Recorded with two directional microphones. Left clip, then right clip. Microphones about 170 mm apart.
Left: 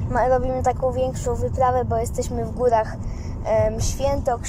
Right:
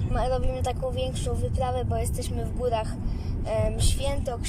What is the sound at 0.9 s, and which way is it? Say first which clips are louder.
Speech: left 7 dB; 25° right (ahead or behind).